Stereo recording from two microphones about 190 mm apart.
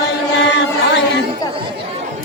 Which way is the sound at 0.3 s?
65° left (ahead or behind).